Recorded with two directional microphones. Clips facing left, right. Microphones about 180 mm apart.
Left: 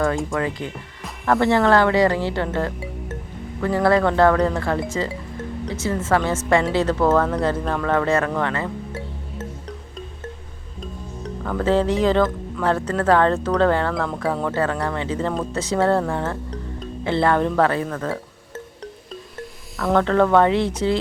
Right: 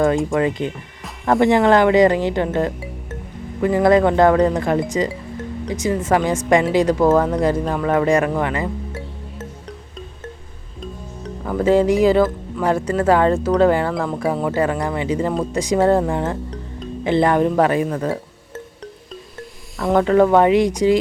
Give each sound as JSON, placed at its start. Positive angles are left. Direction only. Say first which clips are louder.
{"t": 0.3, "sound": "a woman's voice", "louder": "right 5 dB", "side_deg": -20}
{"t": 11.4, "sound": "a woman's voice", "louder": "right 4 dB", "side_deg": -10}
{"t": 19.8, "sound": "a woman's voice", "louder": "right 3 dB", "side_deg": -15}